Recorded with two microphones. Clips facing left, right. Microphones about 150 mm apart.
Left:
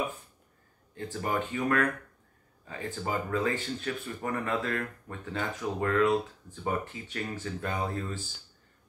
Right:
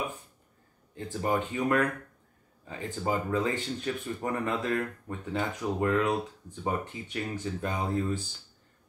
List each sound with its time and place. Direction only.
0.9 s speech: 20° right (ahead or behind)